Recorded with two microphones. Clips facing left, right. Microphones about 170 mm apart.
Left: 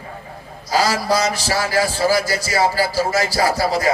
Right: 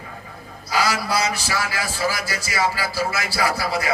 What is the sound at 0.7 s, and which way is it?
A man's voice, 35° left (ahead or behind).